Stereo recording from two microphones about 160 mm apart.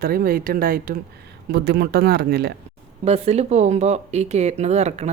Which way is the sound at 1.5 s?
90° right.